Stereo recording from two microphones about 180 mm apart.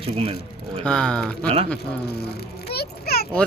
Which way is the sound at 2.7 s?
60° left (ahead or behind).